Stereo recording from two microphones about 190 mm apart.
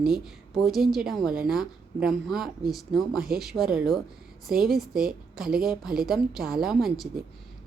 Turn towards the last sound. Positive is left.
turn(degrees=0)  # may be behind; listen again after turning